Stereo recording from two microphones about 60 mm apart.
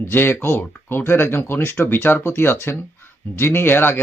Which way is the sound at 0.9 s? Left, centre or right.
Left.